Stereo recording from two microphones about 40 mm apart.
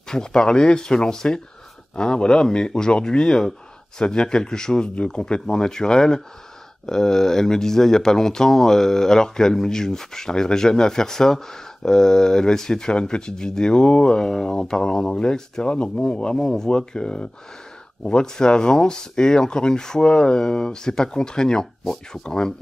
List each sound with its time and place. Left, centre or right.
0.1 s speech: centre
21.8 s speech: centre
22.2 s speech: centre